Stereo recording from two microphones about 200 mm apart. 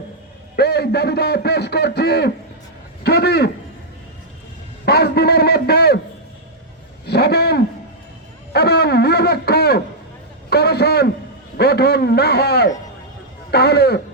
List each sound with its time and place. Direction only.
0.5 s a man's voice: 55° left (ahead or behind)
4.9 s a man's voice: 50° left (ahead or behind)
7.0 s a sound: 55° left (ahead or behind)
11.5 s a man's voice: 55° left (ahead or behind)